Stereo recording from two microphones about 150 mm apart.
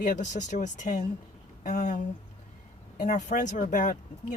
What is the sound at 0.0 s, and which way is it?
Speech, 55° left (ahead or behind).